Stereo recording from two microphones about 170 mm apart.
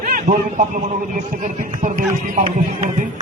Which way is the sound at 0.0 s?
50° right (ahead or behind).